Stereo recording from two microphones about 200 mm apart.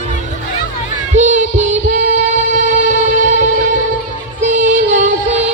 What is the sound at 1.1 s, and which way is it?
Music, 40° right (ahead or behind).